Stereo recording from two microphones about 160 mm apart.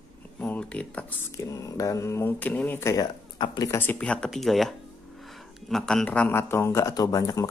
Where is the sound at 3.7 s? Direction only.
10° left (ahead or behind).